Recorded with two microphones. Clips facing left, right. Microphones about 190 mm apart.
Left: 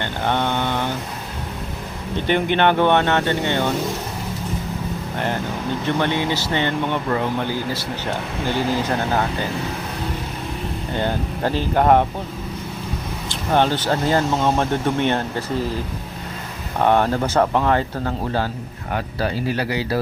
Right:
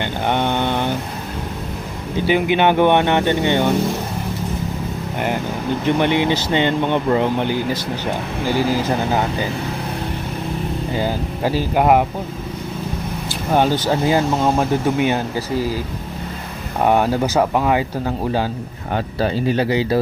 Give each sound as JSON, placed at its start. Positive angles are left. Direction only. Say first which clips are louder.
{"t": 0.0, "sound": "mantra", "louder": "right 2 dB", "side_deg": -15}
{"t": 2.1, "sound": "speech", "louder": "right 2 dB", "side_deg": -10}
{"t": 5.8, "sound": "speech", "louder": "right 5 dB", "side_deg": -15}
{"t": 10.9, "sound": "speech", "louder": "left 1 dB", "side_deg": -5}
{"t": 13.5, "sound": "speech", "louder": "right 2 dB", "side_deg": -10}
{"t": 16.8, "sound": "speech", "louder": "right 1 dB", "side_deg": -10}
{"t": 18.9, "sound": "speech", "louder": "right 4 dB", "side_deg": -25}